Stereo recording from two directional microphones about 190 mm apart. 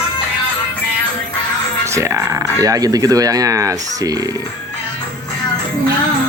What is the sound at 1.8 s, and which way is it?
Speech, 15° right (ahead or behind).